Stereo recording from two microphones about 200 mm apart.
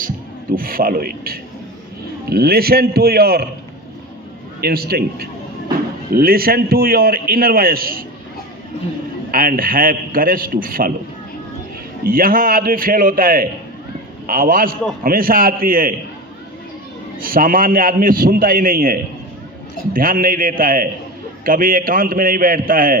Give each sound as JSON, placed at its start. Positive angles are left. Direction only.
{"t": 0.5, "sound": "a man's voice", "side_deg": -45}
{"t": 4.6, "sound": "a man's voice", "side_deg": -50}
{"t": 9.3, "sound": "a man's voice", "side_deg": -45}
{"t": 12.0, "sound": "a man's voice", "side_deg": -45}
{"t": 17.2, "sound": "a man's voice", "side_deg": -45}